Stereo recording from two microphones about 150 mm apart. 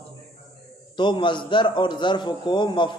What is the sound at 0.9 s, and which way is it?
A man's voice, 30° left (ahead or behind).